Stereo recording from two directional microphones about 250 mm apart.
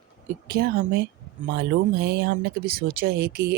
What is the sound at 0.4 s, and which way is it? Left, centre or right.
Speech, right.